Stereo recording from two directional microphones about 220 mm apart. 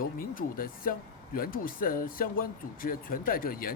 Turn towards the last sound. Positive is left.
turn(degrees=40)  # may be behind; listen again after turning